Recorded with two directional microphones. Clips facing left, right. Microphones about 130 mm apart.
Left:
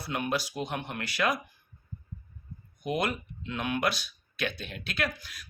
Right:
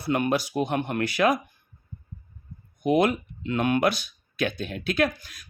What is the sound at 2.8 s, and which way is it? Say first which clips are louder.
Speech: right 9 dB; 55° right (ahead or behind).